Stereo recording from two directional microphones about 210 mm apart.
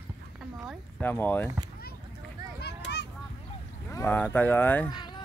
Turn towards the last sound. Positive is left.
turn(degrees=10)  # may be behind; listen again after turning